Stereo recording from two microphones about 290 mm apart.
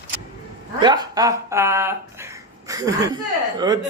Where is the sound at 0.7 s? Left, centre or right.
Centre.